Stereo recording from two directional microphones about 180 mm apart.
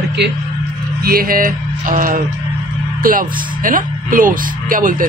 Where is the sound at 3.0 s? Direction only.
50° right (ahead or behind).